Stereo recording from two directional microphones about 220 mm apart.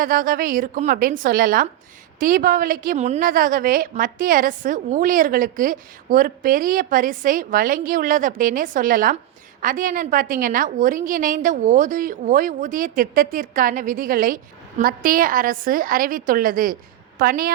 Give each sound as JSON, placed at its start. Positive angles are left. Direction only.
{"t": 0.0, "sound": "a woman's voice", "side_deg": -40}